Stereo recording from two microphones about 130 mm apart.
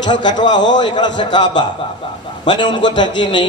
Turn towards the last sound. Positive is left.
turn(degrees=35)  # may be behind; listen again after turning